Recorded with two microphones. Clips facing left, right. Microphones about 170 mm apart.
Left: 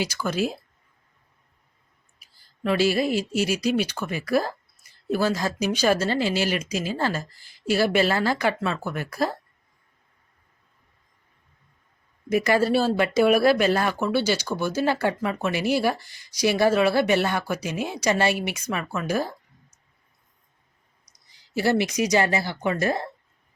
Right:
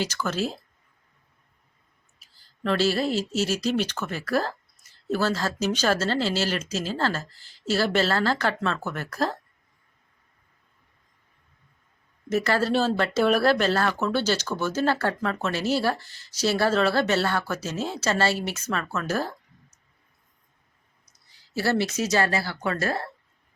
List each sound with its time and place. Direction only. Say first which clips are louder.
0.0 s speech: left 2 dB; 10° left (ahead or behind)
2.1 s speech: left 1 dB; 10° left (ahead or behind)
12.3 s speech: left 3 dB; 15° left (ahead or behind)
21.0 s speech: left 1 dB; 15° left (ahead or behind)